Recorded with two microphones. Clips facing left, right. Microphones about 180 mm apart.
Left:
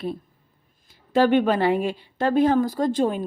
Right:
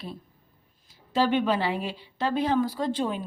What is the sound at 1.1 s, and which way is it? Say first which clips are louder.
Speech: left 5 dB; 55° left (ahead or behind).